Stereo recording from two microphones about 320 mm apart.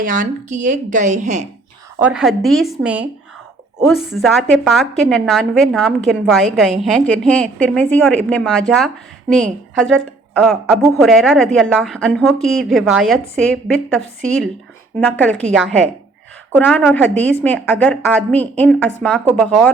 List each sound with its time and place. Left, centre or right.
0.0 s speech: right
2.0 s a woman's voice: centre